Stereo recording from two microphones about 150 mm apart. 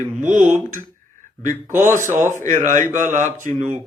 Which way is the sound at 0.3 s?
60° right (ahead or behind).